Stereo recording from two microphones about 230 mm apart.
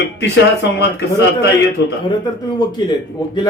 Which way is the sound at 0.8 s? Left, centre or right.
Left.